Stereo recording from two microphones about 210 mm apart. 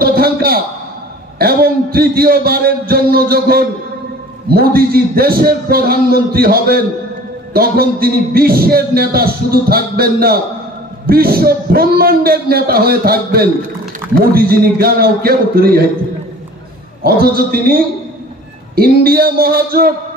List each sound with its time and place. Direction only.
0.0 s a sound: 45° right (ahead or behind)
1.4 s a man's voice: 45° right (ahead or behind)
17.0 s a man's voice: 45° right (ahead or behind)
18.8 s a man's voice: 45° right (ahead or behind)